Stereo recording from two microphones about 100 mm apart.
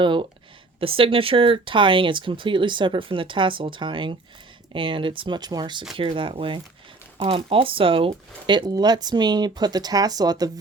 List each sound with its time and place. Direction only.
0.0 s speech: 55° right (ahead or behind)
0.8 s speech: 65° right (ahead or behind); by 5.8 s 45° right (ahead or behind)
6.0 s speech: 60° right (ahead or behind)
8.4 s speech: 50° right (ahead or behind)